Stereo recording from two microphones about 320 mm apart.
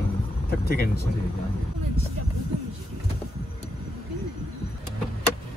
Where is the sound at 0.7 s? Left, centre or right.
Left.